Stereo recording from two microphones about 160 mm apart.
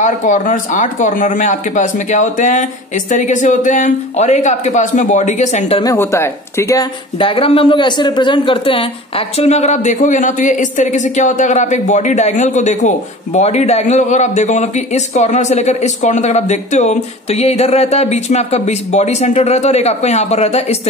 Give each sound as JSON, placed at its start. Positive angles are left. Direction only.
{"t": 0.0, "sound": "speech", "side_deg": 50}
{"t": 5.9, "sound": "speech", "side_deg": 15}
{"t": 7.2, "sound": "speech", "side_deg": 35}